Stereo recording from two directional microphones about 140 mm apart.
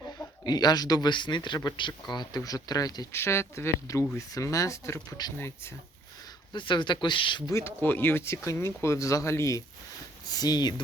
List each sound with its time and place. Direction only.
0.4 s speech: 30° left (ahead or behind)
6.5 s speech: 35° left (ahead or behind)
7.5 s speech: 15° left (ahead or behind)